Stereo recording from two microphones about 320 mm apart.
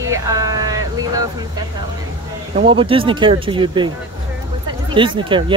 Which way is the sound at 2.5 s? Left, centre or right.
Centre.